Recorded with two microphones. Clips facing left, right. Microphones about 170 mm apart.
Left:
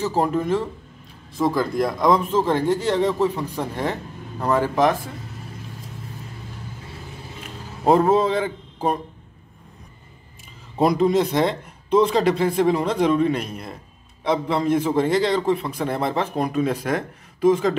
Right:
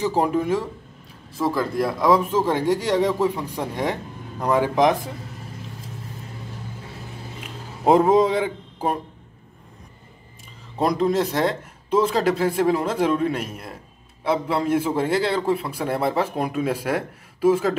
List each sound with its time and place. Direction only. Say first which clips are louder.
0.0 s a man's voice: even; 10° right (ahead or behind)
7.8 s speech: right 1 dB; 15° right (ahead or behind)
10.8 s a man's voice: left 2 dB; 5° left (ahead or behind)